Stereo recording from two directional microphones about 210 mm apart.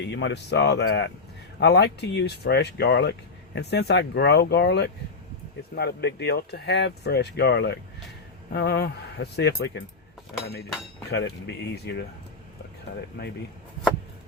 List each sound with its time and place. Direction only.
0.1 s speech: 60° left (ahead or behind)
11.1 s speech: 55° left (ahead or behind)